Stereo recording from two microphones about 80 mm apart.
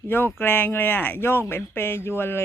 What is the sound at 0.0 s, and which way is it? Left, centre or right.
Speech, left.